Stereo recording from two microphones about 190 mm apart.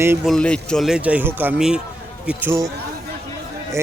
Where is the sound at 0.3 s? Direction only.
5° left (ahead or behind); by 2.6 s 10° right (ahead or behind).